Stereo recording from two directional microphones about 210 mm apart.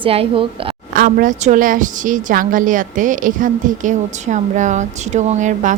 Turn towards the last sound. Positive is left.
turn(degrees=-35)  # may be behind; listen again after turning